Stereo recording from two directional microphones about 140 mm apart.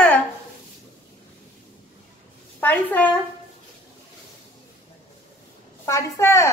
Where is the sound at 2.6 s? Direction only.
10° left (ahead or behind).